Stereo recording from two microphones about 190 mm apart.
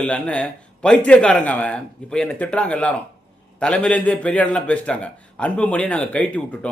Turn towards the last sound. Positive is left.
turn(degrees=10)  # may be behind; listen again after turning